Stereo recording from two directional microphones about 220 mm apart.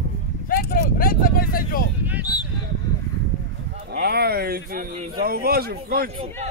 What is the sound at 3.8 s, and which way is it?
Speech, 45° right (ahead or behind).